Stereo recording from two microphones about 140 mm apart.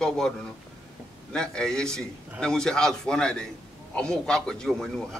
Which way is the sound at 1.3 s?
5° left (ahead or behind).